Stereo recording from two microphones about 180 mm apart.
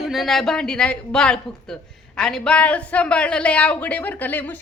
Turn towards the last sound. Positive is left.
turn(degrees=10)  # may be behind; listen again after turning